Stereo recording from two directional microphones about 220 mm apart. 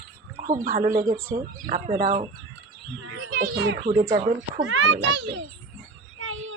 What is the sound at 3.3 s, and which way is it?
Speech, 45° right (ahead or behind).